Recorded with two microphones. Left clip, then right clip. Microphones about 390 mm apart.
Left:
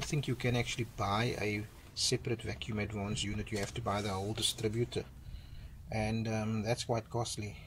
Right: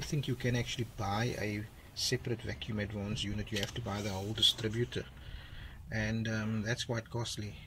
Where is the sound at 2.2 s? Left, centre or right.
Centre.